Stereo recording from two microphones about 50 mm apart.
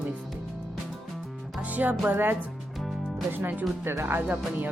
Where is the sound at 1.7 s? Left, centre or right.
Right.